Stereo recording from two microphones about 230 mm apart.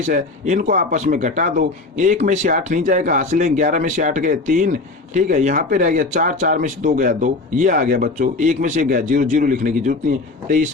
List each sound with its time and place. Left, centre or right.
0.0 s speech: right